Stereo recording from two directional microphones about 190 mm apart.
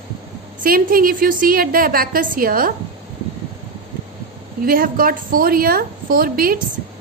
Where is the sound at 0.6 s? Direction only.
50° right (ahead or behind).